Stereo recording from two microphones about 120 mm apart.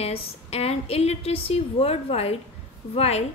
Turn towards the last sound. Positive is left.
turn(degrees=60)  # may be behind; listen again after turning